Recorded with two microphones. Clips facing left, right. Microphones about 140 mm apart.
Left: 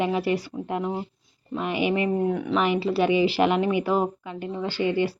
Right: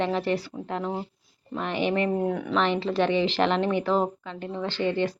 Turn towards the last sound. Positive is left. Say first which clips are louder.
# left 2 dB
turn(degrees=10)  # may be behind; listen again after turning